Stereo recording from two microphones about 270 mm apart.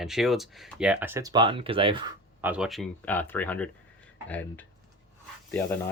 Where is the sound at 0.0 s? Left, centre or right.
Centre.